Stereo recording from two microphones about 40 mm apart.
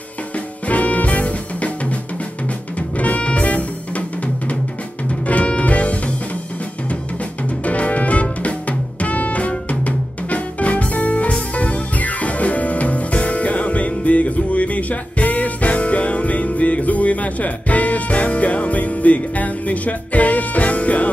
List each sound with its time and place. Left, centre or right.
0.7 s music: left
3.0 s music: left
5.2 s music: left
7.4 s music: left